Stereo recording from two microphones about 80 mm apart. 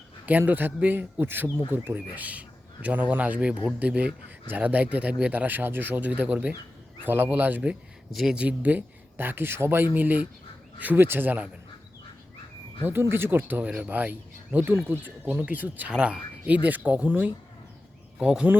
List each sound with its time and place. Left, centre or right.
0.3 s speech: right
8.1 s speech: centre
8.4 s speech: centre
12.8 s speech: right
18.2 s speech: centre